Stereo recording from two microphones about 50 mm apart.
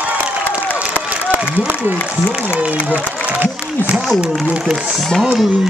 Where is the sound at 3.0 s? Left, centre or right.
Right.